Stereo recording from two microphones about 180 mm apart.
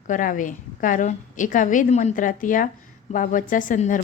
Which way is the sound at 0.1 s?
45° left (ahead or behind).